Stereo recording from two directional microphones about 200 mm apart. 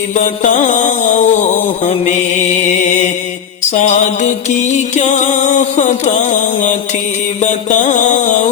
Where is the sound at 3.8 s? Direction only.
35° left (ahead or behind).